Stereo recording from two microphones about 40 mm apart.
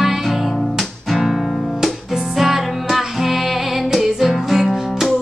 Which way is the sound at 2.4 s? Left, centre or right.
Centre.